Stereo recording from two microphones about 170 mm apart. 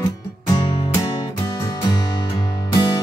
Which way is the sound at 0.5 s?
25° left (ahead or behind).